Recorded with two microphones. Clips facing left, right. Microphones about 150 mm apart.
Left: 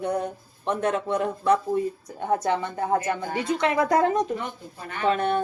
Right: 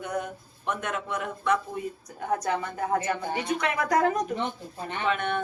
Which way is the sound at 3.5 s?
25° left (ahead or behind).